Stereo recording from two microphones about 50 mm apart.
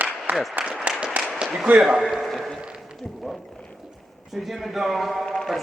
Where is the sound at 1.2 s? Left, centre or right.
Right.